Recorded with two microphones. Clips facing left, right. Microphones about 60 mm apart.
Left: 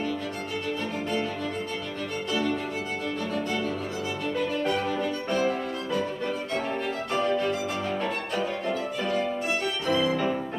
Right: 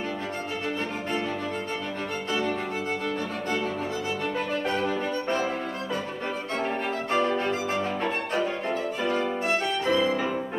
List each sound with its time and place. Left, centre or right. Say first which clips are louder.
4.9 s music: even; right
6.5 s violin: right 1 dB; right